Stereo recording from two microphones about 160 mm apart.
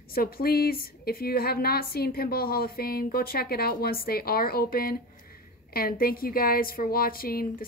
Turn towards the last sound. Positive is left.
turn(degrees=65)  # may be behind; listen again after turning